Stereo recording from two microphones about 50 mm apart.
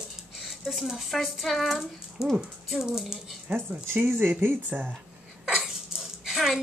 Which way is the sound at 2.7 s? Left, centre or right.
Centre.